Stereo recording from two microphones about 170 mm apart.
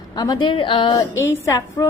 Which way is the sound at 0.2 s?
25° left (ahead or behind).